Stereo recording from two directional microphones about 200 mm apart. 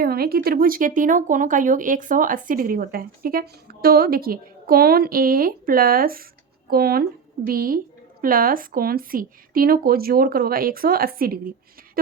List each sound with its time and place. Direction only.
0.0 s speech: 50° right (ahead or behind)